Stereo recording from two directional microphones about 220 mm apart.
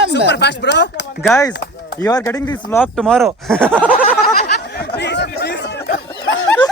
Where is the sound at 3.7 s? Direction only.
10° right (ahead or behind).